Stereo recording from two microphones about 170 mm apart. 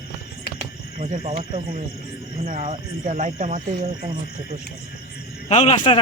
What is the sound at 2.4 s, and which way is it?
Speech, 45° right (ahead or behind).